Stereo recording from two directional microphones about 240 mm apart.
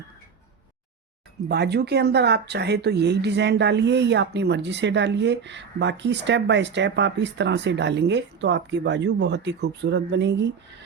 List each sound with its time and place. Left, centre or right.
1.5 s speech: right